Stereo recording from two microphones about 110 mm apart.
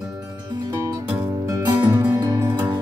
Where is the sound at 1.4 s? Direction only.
35° right (ahead or behind).